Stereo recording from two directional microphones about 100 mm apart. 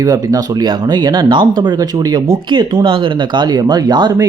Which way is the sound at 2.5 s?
55° right (ahead or behind).